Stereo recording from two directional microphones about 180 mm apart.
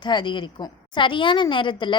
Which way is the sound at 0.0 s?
25° left (ahead or behind).